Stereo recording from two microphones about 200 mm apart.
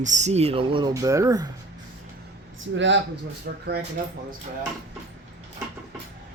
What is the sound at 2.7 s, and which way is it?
Speech, 65° right (ahead or behind).